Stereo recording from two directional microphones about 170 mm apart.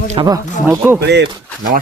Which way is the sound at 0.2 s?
20° right (ahead or behind).